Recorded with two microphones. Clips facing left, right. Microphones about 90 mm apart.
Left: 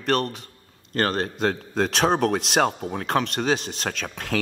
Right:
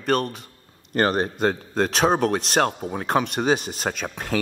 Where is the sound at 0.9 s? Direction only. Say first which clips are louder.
Right 3 dB; 15° right (ahead or behind).